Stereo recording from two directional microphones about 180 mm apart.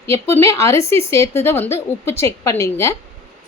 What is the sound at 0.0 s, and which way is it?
A woman's voice, 15° left (ahead or behind).